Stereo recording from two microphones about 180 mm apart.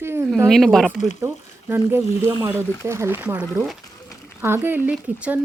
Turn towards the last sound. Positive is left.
turn(degrees=-5)  # may be behind; listen again after turning